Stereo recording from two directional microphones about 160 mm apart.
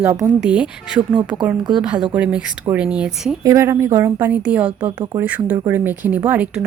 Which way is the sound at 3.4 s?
15° right (ahead or behind).